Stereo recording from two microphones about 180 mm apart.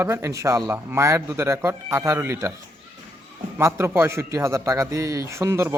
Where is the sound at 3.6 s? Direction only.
15° right (ahead or behind).